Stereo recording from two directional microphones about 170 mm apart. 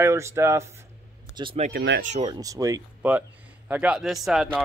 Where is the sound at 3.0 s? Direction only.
10° right (ahead or behind).